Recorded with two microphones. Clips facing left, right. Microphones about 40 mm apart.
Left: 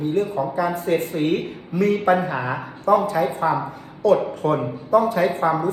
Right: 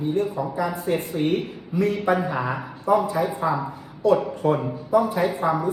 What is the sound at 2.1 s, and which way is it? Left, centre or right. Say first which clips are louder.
Speech: left 4 dB; left.